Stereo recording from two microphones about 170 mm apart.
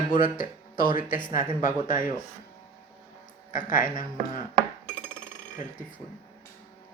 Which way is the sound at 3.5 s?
50° left (ahead or behind).